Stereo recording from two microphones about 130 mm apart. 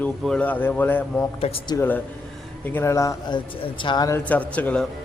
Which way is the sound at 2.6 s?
20° left (ahead or behind).